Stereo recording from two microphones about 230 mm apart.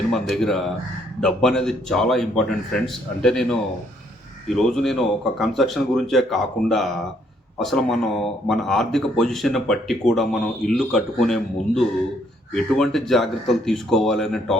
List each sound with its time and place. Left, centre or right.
0.1 s speech: centre